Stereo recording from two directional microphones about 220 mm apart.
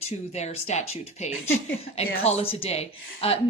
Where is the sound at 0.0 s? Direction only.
30° left (ahead or behind).